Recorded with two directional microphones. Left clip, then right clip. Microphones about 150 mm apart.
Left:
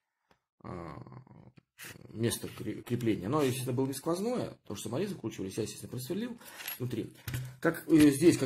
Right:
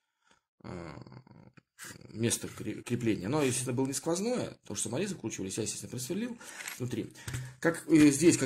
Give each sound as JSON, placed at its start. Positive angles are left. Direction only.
{"t": 0.6, "sound": "groan", "side_deg": -15}
{"t": 2.1, "sound": "speech", "side_deg": -20}